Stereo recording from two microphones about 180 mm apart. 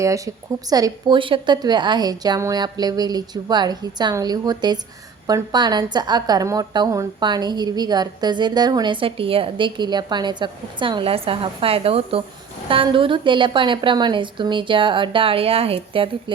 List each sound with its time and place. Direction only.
0.7 s a woman's voice: 20° right (ahead or behind)